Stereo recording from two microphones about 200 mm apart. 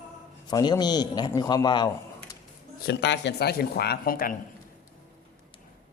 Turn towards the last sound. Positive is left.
turn(degrees=45)  # may be behind; listen again after turning